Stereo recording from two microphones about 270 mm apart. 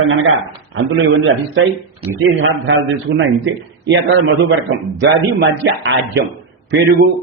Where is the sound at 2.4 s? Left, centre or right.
Right.